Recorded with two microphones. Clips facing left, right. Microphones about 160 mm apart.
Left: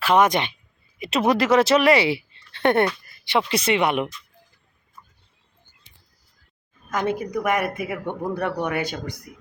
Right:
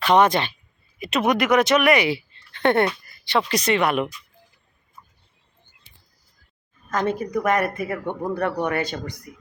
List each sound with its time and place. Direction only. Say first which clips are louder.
0.0 s speech: right 1 dB; centre (ahead or behind)
0.3 s a woman's voice: even; 20° left (ahead or behind)
6.9 s speech: right 1 dB; 10° left (ahead or behind)